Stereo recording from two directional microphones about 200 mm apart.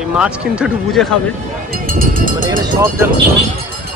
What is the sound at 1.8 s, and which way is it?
Speech, 45° right (ahead or behind).